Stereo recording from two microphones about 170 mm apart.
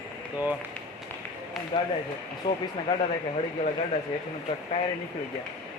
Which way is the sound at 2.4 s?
30° left (ahead or behind).